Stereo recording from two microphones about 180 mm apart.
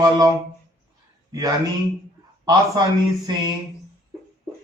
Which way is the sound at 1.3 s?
20° right (ahead or behind).